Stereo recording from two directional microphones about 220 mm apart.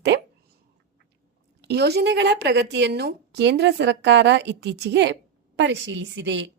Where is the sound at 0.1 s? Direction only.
50° right (ahead or behind).